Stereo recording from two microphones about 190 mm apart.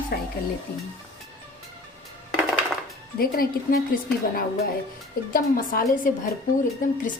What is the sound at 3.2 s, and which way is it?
Speech, 50° left (ahead or behind).